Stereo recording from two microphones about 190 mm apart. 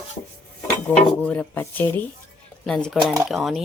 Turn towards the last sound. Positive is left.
turn(degrees=0)  # may be behind; listen again after turning